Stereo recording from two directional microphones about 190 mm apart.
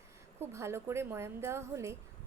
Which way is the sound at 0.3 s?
15° right (ahead or behind).